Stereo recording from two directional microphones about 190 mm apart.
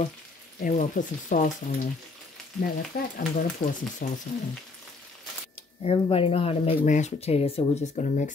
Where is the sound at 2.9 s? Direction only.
50° left (ahead or behind).